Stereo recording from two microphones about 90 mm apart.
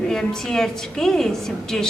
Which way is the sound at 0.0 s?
5° left (ahead or behind).